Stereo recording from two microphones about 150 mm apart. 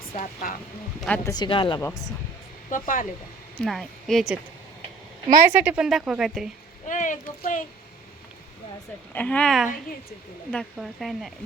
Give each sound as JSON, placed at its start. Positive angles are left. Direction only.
{"t": 0.1, "sound": "speech", "side_deg": 65}
{"t": 1.2, "sound": "speech", "side_deg": 30}
{"t": 1.8, "sound": "speech", "side_deg": 20}
{"t": 2.6, "sound": "speech", "side_deg": 65}
{"t": 3.6, "sound": "speech", "side_deg": 5}
{"t": 5.5, "sound": "speech", "side_deg": -10}
{"t": 6.8, "sound": "a sound", "side_deg": 55}
{"t": 9.1, "sound": "speech", "side_deg": 10}